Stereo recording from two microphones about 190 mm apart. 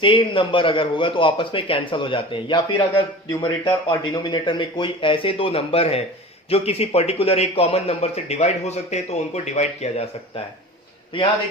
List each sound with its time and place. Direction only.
0.0 s a man's voice: 25° left (ahead or behind)